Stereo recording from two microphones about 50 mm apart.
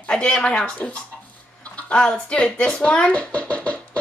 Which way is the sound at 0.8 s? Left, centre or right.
Left.